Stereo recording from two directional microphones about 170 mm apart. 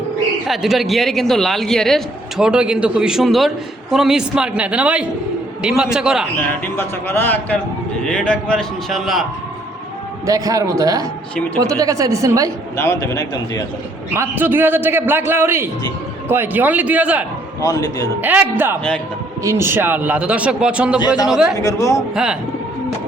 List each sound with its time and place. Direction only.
0.4 s a woman's voice: centre (ahead or behind)
6.7 s a man's voice: 10° left (ahead or behind)
10.2 s a woman's voice: 20° right (ahead or behind)
12.7 s a man's voice: 15° left (ahead or behind)
14.1 s a man's voice: 10° right (ahead or behind)
17.6 s a man's voice: 20° left (ahead or behind)
18.2 s a man's voice: 10° right (ahead or behind)
21.5 s a man's voice: 20° left (ahead or behind)
22.1 s a woman's voice: 5° right (ahead or behind)